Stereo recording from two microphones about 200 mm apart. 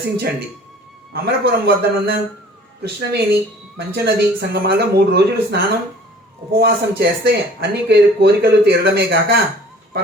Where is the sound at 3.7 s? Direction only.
55° right (ahead or behind).